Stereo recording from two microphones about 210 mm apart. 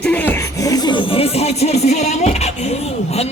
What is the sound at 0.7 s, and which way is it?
Music, 20° left (ahead or behind).